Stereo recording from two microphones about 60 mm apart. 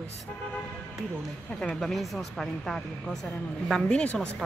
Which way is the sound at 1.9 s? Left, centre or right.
Centre.